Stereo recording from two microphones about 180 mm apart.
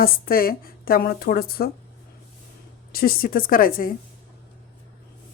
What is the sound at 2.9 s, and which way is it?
A woman's voice, 55° left (ahead or behind).